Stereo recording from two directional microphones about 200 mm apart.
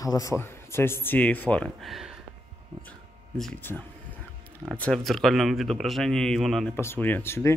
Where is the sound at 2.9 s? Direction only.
5° left (ahead or behind).